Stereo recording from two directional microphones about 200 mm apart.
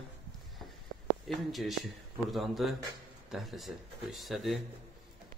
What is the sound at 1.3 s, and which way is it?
A man's voice, centre (ahead or behind).